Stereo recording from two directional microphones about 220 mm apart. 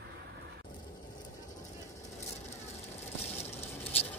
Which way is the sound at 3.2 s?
30° left (ahead or behind).